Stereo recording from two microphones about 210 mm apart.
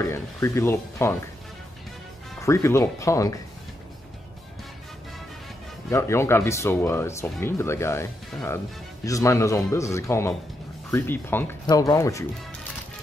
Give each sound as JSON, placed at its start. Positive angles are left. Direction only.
{"t": 0.0, "sound": "speech", "side_deg": 15}
{"t": 2.4, "sound": "speech", "side_deg": 15}
{"t": 5.9, "sound": "speech", "side_deg": 15}